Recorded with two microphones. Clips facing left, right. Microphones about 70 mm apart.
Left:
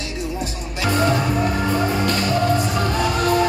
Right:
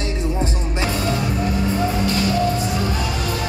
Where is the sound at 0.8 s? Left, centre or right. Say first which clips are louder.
Left 5 dB; left.